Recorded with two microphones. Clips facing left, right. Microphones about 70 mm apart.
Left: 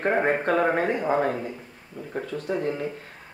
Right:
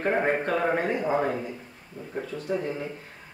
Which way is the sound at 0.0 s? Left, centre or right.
Centre.